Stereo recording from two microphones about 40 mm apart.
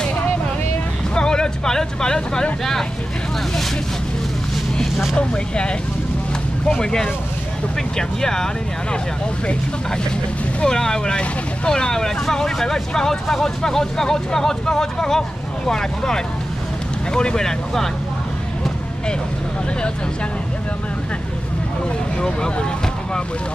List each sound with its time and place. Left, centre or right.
1.1 s speech: left
5.1 s speech: left
8.2 s speech: centre
10.6 s speech: centre
22.2 s speech: centre